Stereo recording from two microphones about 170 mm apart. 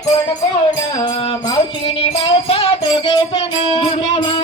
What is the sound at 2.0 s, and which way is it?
Music, 35° left (ahead or behind).